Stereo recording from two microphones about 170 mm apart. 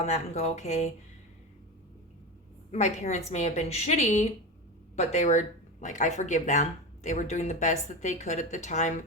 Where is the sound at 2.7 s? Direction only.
45° left (ahead or behind).